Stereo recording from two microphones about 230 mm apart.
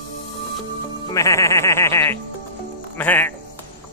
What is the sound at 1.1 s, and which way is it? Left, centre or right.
Speech, centre.